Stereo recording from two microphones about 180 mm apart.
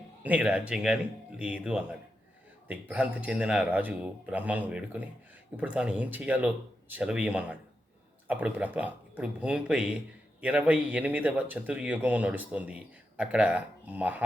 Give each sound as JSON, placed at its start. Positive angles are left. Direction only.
{"t": 0.2, "sound": "speech", "side_deg": -10}